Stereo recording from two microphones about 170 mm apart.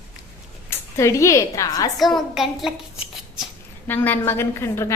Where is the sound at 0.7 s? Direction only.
15° left (ahead or behind).